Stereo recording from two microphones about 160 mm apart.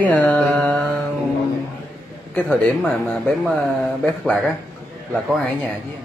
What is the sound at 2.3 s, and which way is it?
Mantra, 5° left (ahead or behind).